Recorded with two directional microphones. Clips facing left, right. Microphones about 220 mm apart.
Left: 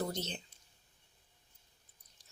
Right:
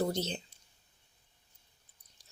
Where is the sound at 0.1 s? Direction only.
30° right (ahead or behind).